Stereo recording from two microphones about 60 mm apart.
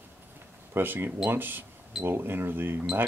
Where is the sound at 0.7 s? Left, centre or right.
Right.